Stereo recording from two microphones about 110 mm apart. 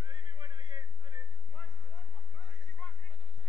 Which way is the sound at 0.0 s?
45° right (ahead or behind).